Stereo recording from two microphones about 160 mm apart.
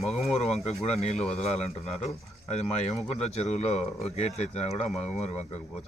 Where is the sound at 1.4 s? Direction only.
45° left (ahead or behind).